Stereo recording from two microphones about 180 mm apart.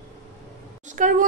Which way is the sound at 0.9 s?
45° right (ahead or behind).